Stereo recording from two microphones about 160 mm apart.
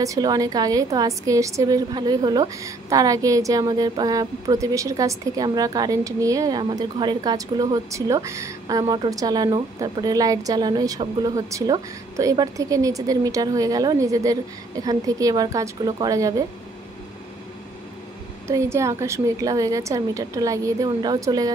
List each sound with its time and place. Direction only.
0.0 s a woman's voice: 20° right (ahead or behind)
18.5 s a woman's voice: 15° right (ahead or behind)